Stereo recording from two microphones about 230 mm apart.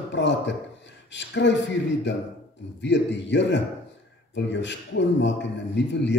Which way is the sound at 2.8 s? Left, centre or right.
Left.